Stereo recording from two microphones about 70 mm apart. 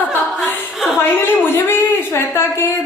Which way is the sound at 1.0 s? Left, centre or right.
Left.